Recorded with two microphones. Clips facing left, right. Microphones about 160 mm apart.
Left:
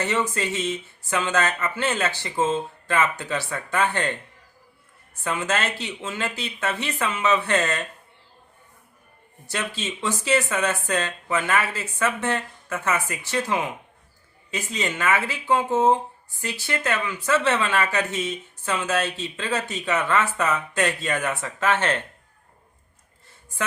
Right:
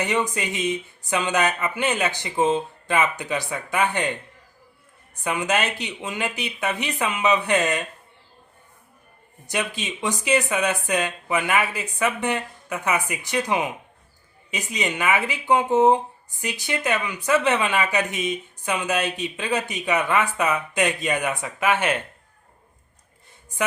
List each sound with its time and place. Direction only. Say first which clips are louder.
0.0 s speech: right 1 dB; 15° right (ahead or behind)
9.5 s speech: right 2 dB; 15° right (ahead or behind)